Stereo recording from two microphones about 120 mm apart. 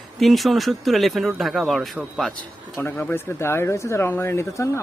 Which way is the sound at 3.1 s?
20° left (ahead or behind).